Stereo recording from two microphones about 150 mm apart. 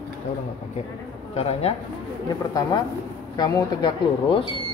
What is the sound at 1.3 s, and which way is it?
Speech, 45° left (ahead or behind).